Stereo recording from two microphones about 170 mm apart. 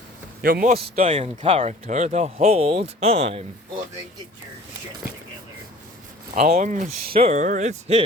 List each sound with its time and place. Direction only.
0.4 s a man's voice: 60° right (ahead or behind)
1.0 s speech: 35° right (ahead or behind)
6.5 s speech: 45° right (ahead or behind)